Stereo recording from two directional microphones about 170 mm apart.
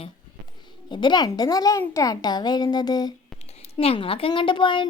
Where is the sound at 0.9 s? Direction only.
25° left (ahead or behind).